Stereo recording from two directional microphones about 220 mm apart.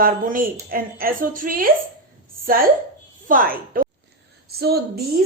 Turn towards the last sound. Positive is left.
turn(degrees=-45)  # may be behind; listen again after turning